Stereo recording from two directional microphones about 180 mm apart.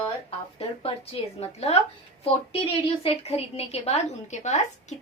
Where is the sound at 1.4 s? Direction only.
35° left (ahead or behind).